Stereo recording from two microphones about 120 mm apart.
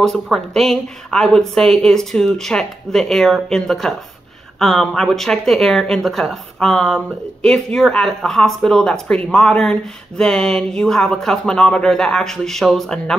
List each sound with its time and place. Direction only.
0.0 s speech: 5° left (ahead or behind)